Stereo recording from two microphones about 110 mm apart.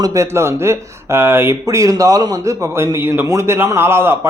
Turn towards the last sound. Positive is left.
turn(degrees=-20)  # may be behind; listen again after turning